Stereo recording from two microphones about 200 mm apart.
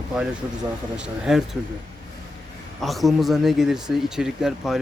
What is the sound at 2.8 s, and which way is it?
Speech, centre (ahead or behind).